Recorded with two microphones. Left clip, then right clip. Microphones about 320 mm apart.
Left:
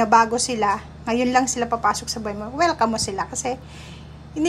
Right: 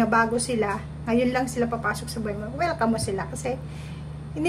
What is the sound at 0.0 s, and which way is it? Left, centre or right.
A woman's voice, centre.